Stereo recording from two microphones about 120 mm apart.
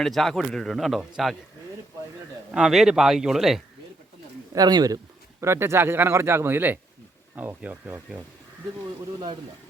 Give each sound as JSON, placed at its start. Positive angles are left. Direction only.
{"t": 0.0, "sound": "speech", "side_deg": 0}
{"t": 2.5, "sound": "speech", "side_deg": -5}
{"t": 4.5, "sound": "speech", "side_deg": -35}
{"t": 5.4, "sound": "a man's voice", "side_deg": -20}